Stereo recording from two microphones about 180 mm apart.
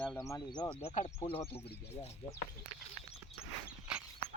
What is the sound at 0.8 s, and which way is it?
Speech, 40° left (ahead or behind).